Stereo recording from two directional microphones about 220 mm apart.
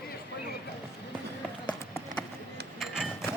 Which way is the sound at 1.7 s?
5° left (ahead or behind).